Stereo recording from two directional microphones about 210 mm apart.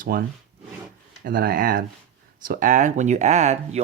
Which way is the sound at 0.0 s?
45° right (ahead or behind).